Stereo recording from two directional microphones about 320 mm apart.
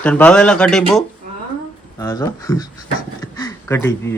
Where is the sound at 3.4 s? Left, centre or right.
Centre.